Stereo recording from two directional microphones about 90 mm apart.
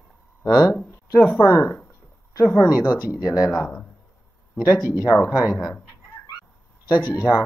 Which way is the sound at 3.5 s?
10° left (ahead or behind).